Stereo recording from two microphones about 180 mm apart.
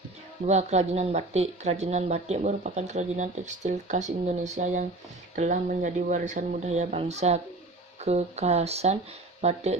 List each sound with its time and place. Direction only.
0.4 s speech: 40° right (ahead or behind)